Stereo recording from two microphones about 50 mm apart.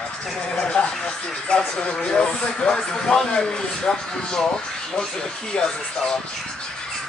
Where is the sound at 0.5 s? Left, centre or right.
Left.